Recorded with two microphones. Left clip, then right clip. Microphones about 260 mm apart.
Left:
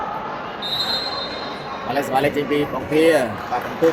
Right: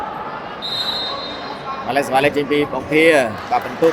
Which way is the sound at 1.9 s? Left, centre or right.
Right.